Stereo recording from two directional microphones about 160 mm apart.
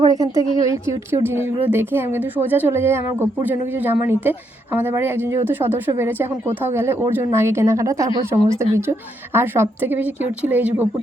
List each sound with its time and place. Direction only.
0.0 s a woman's voice: 25° right (ahead or behind)